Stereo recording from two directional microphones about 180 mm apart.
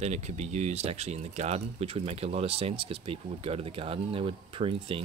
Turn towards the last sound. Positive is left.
turn(degrees=-30)  # may be behind; listen again after turning